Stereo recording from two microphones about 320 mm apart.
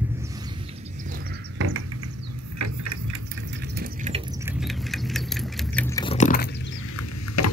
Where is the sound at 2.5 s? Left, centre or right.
Right.